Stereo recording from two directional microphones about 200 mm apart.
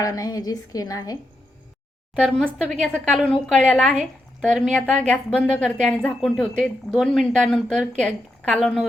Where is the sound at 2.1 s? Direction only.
5° left (ahead or behind).